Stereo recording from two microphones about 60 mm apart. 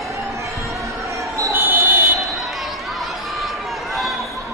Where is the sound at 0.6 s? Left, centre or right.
Right.